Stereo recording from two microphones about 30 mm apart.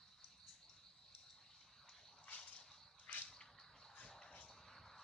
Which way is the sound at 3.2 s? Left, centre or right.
Centre.